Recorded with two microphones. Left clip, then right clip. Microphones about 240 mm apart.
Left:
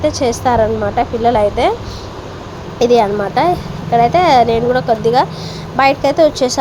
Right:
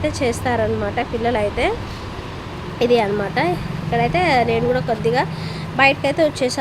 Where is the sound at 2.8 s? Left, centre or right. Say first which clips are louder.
Left 5 dB; centre.